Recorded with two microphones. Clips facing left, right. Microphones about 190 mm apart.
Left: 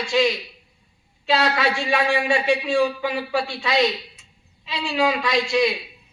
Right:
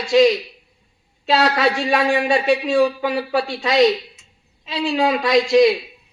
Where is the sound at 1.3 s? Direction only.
40° right (ahead or behind).